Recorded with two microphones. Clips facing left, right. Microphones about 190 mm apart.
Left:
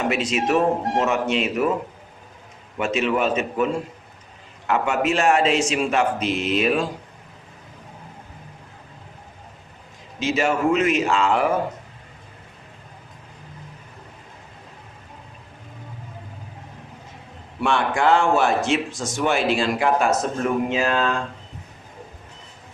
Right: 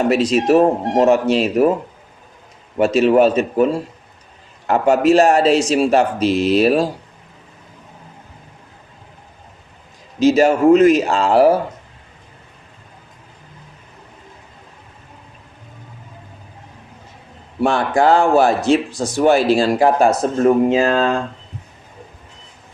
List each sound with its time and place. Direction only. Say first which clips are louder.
0.0 s speech: right 7 dB; 35° right (ahead or behind)
2.7 s speech: right 9 dB; 35° right (ahead or behind)
10.2 s speech: right 9 dB; 40° right (ahead or behind)
17.6 s speech: right 5 dB; 35° right (ahead or behind)